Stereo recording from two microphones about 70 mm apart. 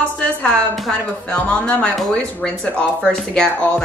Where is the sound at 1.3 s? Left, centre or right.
Centre.